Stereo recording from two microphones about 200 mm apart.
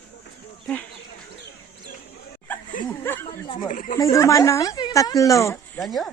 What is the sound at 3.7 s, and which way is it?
Speech, 40° left (ahead or behind).